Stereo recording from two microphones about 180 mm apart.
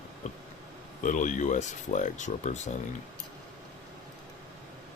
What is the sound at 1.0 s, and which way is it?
Speech, 45° left (ahead or behind).